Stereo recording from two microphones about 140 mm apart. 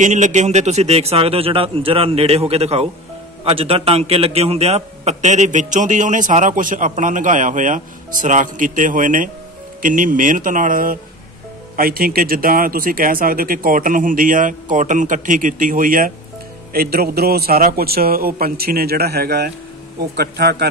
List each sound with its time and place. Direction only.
0.0 s a man's voice: 60° right (ahead or behind); by 16.1 s 80° right
16.7 s a man's voice: 90° right